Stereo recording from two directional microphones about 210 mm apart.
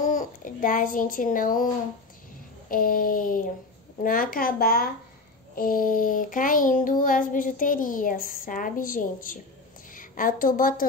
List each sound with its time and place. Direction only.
0.0 s a child's voice: 35° left (ahead or behind)
2.7 s child singing: 40° left (ahead or behind)
4.0 s speech: 40° left (ahead or behind)
5.6 s child singing: 40° left (ahead or behind)
9.9 s a woman's voice: 40° left (ahead or behind)